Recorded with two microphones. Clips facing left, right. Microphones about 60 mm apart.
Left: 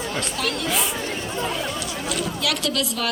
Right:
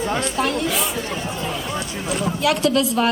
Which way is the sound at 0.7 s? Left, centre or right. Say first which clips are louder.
Right 1 dB; centre.